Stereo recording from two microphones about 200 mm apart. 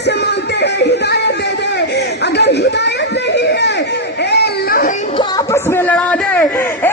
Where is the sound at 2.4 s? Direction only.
60° left (ahead or behind).